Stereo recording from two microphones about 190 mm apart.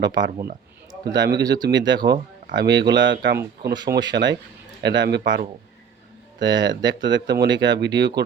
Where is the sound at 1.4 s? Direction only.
20° right (ahead or behind).